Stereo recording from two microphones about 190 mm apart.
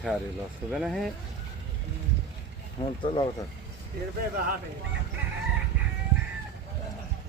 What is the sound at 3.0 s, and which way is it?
Speech, 25° left (ahead or behind).